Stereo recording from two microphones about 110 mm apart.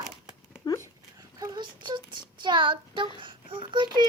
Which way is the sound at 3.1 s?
50° right (ahead or behind).